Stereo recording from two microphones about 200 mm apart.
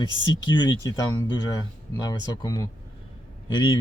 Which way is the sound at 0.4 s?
20° left (ahead or behind).